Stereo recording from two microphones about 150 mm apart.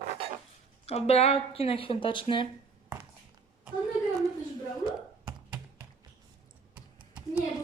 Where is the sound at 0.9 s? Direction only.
45° left (ahead or behind).